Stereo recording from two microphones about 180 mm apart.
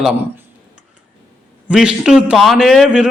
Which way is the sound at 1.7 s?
5° right (ahead or behind).